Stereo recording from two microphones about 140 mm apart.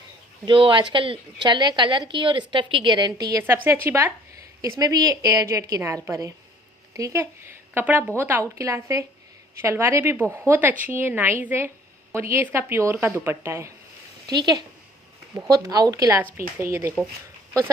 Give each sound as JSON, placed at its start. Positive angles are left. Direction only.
{"t": 0.4, "sound": "a woman's voice", "side_deg": -35}
{"t": 3.4, "sound": "a woman's voice", "side_deg": -15}